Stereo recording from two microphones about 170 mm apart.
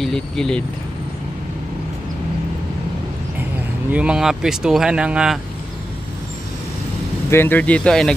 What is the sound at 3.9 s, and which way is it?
Speech, 5° right (ahead or behind).